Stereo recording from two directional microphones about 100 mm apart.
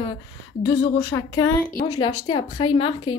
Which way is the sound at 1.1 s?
35° left (ahead or behind).